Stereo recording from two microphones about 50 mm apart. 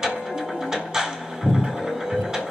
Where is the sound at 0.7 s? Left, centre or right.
Centre.